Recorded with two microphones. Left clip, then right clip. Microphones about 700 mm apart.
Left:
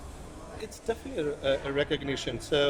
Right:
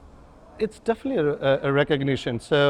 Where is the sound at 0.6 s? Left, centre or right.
Right.